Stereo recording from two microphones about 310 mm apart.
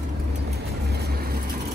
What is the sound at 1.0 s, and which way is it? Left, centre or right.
Vehicle, right.